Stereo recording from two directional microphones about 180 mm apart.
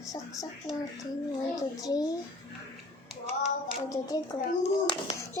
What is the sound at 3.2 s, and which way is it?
Clapping, 40° right (ahead or behind).